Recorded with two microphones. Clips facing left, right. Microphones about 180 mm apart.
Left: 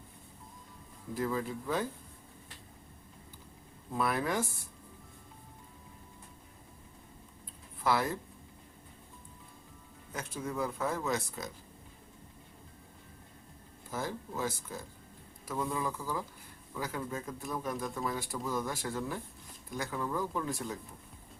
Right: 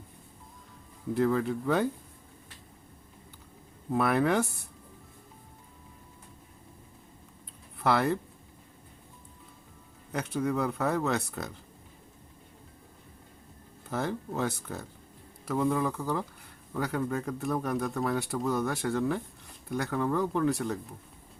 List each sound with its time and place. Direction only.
1.1 s speech: 65° right (ahead or behind)
3.9 s speech: 65° right (ahead or behind)
7.8 s speech: 65° right (ahead or behind)
10.1 s speech: 65° right (ahead or behind)
13.9 s speech: 65° right (ahead or behind)